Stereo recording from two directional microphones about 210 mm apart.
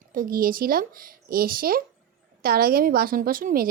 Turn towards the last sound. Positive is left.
turn(degrees=-40)  # may be behind; listen again after turning